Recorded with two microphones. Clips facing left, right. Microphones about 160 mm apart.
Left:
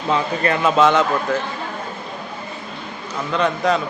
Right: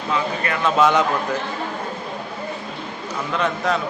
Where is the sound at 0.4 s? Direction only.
35° left (ahead or behind).